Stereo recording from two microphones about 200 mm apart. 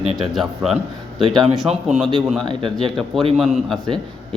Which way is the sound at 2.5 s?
25° right (ahead or behind).